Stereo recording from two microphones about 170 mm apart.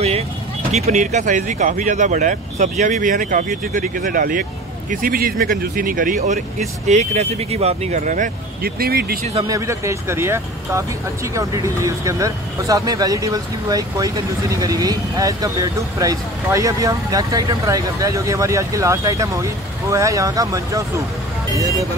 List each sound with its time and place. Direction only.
0.7 s speech: 40° right (ahead or behind); by 9.2 s 65° right (ahead or behind)
9.2 s speech: 35° right (ahead or behind)
9.5 s speech: 15° right (ahead or behind)